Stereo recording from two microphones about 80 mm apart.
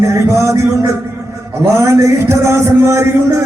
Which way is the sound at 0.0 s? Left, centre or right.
Right.